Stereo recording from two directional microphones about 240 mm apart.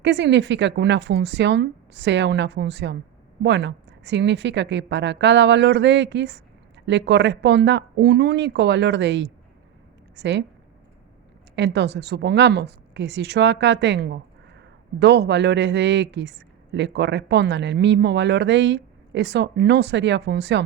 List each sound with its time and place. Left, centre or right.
0.0 s a woman's voice: right
11.5 s a woman's voice: right